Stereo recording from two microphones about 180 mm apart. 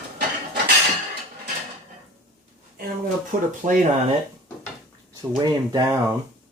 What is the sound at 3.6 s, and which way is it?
Speech, 30° right (ahead or behind).